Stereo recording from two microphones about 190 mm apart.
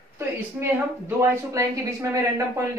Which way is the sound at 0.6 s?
15° right (ahead or behind).